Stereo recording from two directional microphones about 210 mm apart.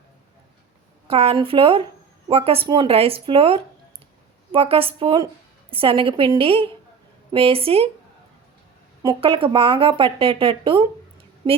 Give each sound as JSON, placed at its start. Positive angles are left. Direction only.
{"t": 1.0, "sound": "a woman's voice", "side_deg": -25}
{"t": 9.0, "sound": "a woman's voice", "side_deg": -25}